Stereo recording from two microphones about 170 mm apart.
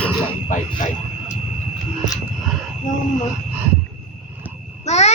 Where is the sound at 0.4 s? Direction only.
45° left (ahead or behind).